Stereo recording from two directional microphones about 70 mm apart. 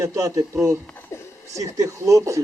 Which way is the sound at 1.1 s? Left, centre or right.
Left.